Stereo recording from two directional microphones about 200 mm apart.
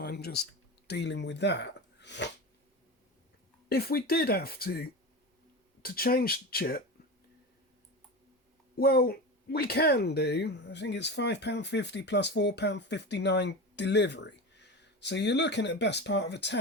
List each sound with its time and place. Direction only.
0.0 s speech: 55° left (ahead or behind)
3.7 s speech: 50° left (ahead or behind)
8.7 s speech: 50° left (ahead or behind)